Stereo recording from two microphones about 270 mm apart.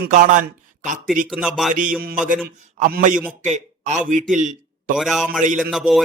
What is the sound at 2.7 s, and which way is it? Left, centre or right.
Speech, right.